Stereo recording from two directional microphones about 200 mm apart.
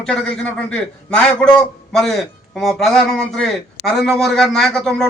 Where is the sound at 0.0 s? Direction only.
5° left (ahead or behind).